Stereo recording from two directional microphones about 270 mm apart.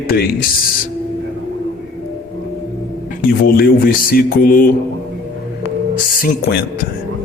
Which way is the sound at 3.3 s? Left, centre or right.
Left.